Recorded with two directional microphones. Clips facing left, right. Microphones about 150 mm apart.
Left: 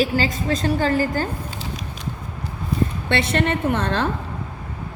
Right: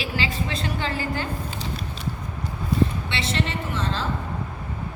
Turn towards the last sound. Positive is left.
turn(degrees=60)  # may be behind; listen again after turning